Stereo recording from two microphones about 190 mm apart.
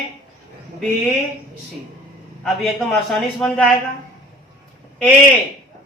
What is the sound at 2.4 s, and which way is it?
A man's voice, centre (ahead or behind).